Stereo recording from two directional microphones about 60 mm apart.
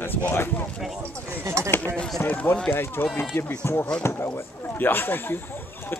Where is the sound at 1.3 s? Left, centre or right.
Right.